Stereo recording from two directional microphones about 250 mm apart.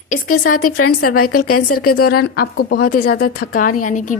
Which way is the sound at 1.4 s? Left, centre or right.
Left.